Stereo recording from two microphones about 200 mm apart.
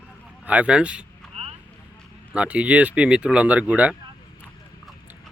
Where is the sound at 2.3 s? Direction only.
5° right (ahead or behind).